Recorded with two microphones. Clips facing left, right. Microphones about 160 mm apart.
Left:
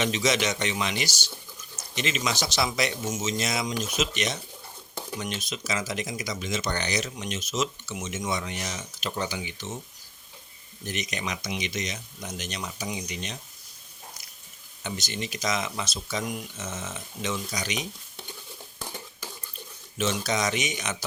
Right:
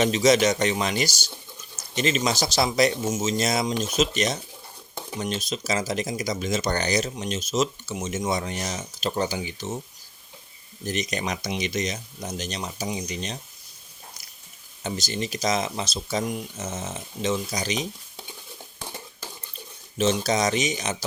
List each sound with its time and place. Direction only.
0.0 s speech: 40° right (ahead or behind)
10.8 s speech: 35° right (ahead or behind)
14.8 s speech: 35° right (ahead or behind)
20.0 s speech: 30° right (ahead or behind)